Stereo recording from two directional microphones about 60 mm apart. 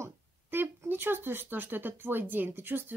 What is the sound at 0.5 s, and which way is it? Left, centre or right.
Speech, right.